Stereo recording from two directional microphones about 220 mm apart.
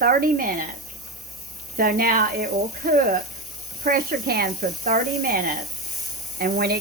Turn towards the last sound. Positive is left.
turn(degrees=-45)  # may be behind; listen again after turning